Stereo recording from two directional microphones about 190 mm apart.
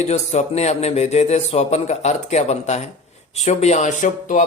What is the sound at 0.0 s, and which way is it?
Speech, 35° left (ahead or behind).